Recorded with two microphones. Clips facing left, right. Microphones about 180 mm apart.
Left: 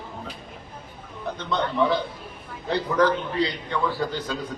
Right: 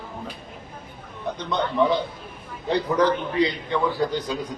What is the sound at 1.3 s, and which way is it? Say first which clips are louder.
A man's voice: right 1 dB; 20° right (ahead or behind).